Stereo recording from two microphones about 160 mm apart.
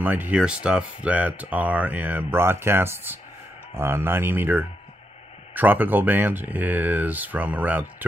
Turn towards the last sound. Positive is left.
turn(degrees=-10)  # may be behind; listen again after turning